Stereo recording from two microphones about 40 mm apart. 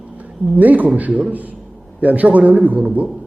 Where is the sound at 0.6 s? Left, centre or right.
Right.